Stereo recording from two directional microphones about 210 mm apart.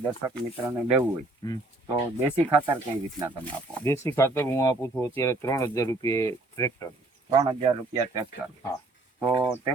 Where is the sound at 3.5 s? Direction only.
10° left (ahead or behind).